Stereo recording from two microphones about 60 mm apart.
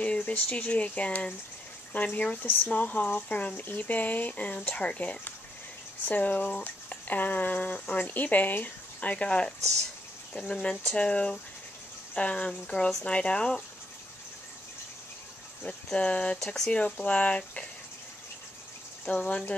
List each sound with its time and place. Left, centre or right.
0.0 s speech: left
10.5 s speech: centre
15.6 s speech: centre
19.1 s speech: centre